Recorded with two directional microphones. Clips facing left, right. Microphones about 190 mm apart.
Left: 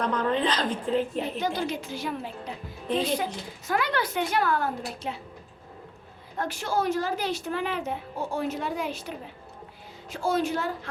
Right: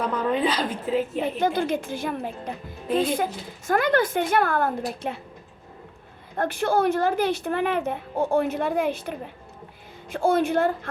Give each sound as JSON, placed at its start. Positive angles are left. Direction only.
{"t": 0.0, "sound": "a woman's voice", "side_deg": -10}
{"t": 1.4, "sound": "a woman's voice", "side_deg": -50}
{"t": 6.3, "sound": "a woman's voice", "side_deg": -55}